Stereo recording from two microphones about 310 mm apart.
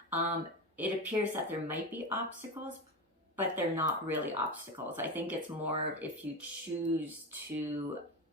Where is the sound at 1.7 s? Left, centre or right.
Centre.